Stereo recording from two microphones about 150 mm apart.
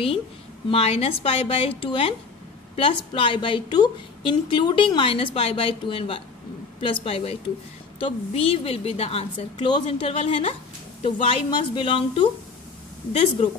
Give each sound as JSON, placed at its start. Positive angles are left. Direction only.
{"t": 0.7, "sound": "a woman's voice", "side_deg": 40}